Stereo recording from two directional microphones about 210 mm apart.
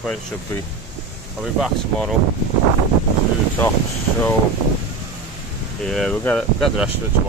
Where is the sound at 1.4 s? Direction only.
Centre (ahead or behind).